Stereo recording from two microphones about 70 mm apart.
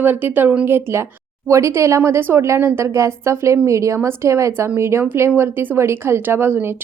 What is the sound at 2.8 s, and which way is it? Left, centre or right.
Speech, right.